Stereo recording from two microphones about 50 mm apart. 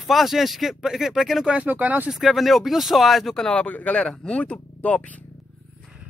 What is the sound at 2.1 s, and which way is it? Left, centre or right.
Speech, centre.